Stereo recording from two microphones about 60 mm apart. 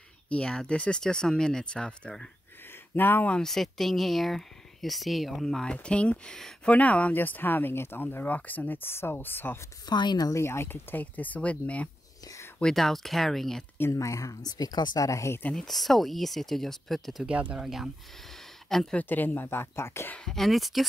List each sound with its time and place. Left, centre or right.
0.3 s speech: centre
3.0 s speech: left
3.3 s speech: centre
6.3 s speech: centre
6.7 s speech: left
10.3 s speech: left
12.7 s speech: centre
13.9 s speech: left
15.5 s speech: centre
17.3 s speech: right
18.7 s a woman's voice: centre
18.9 s speech: left
20.2 s speech: centre